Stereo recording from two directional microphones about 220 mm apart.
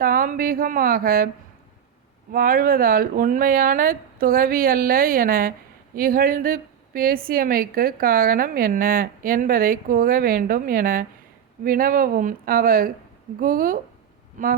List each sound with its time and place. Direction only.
0.0 s a woman's voice: 40° right (ahead or behind)
2.3 s a woman's voice: 40° right (ahead or behind)